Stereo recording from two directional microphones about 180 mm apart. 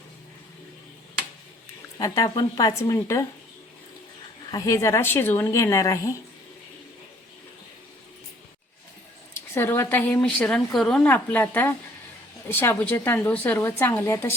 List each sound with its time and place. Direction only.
2.0 s a woman's voice: 20° left (ahead or behind)
4.5 s a woman's voice: 15° left (ahead or behind)
9.6 s a woman's voice: 15° left (ahead or behind)